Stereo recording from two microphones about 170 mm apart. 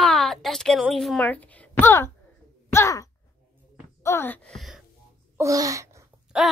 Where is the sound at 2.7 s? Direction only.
15° left (ahead or behind).